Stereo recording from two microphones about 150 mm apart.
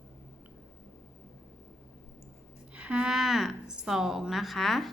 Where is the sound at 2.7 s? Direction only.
10° right (ahead or behind).